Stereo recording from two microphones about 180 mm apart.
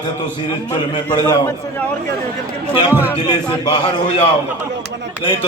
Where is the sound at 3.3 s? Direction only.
25° left (ahead or behind).